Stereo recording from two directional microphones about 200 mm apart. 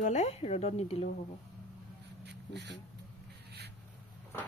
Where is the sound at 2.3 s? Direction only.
60° right (ahead or behind).